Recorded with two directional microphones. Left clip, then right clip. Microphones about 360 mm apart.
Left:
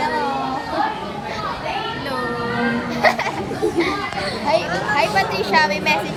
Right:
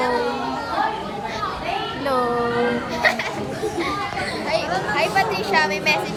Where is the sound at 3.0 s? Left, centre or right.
Centre.